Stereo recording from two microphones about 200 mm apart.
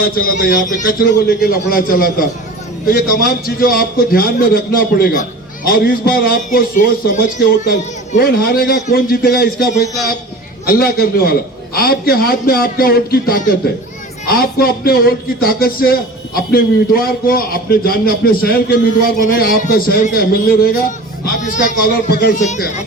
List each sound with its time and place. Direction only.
0.0 s speech: 45° left (ahead or behind)